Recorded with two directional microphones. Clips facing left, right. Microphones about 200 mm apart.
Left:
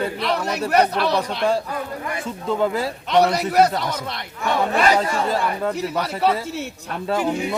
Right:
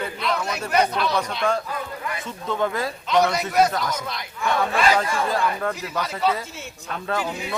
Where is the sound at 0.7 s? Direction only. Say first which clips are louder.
Left 3 dB; 60° left (ahead or behind).